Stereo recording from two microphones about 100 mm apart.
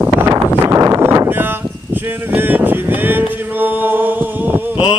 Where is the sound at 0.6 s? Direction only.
35° right (ahead or behind); by 4.6 s 20° right (ahead or behind).